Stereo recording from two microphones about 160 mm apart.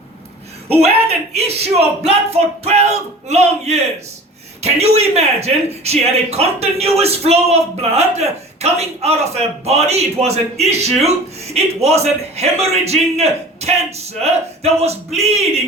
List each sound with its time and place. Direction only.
0.7 s speech: 40° right (ahead or behind)